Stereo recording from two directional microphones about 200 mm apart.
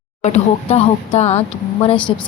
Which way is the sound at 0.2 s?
30° left (ahead or behind).